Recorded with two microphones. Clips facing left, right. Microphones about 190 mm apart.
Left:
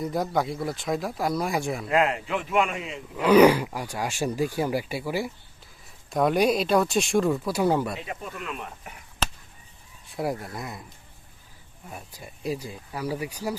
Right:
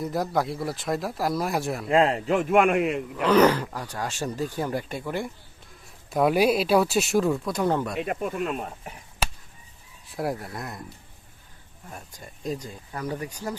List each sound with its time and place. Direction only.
0.0 s speech: centre (ahead or behind)
1.9 s a man's voice: 30° right (ahead or behind); by 3.0 s 60° right (ahead or behind)
3.2 s speech: 10° left (ahead or behind)
5.8 s speech: 5° right (ahead or behind)
7.9 s a man's voice: 55° right (ahead or behind)
9.2 s chop: 10° right (ahead or behind)
10.1 s speech: centre (ahead or behind)
11.9 s speech: 5° left (ahead or behind)